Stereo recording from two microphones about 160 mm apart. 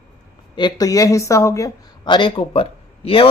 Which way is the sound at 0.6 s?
25° left (ahead or behind).